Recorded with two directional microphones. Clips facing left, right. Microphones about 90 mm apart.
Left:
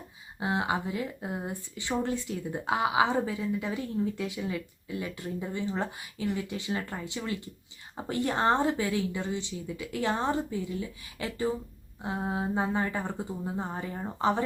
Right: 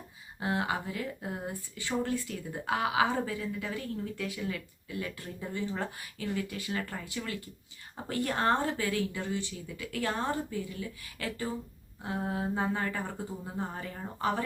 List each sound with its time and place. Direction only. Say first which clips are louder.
0.3 s speech: left 2 dB; 20° left (ahead or behind)